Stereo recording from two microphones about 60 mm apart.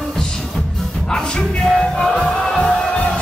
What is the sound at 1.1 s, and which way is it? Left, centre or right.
Music, centre.